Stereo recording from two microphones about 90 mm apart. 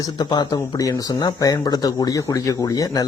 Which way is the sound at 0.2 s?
50° left (ahead or behind).